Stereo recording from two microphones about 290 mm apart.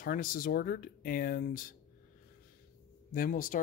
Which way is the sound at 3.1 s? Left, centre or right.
Left.